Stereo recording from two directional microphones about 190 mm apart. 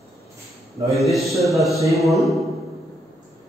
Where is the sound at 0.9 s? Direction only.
Centre (ahead or behind).